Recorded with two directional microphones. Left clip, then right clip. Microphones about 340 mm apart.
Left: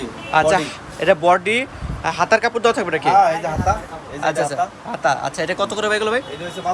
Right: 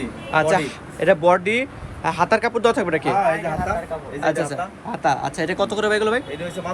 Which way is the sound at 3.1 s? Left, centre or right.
Centre.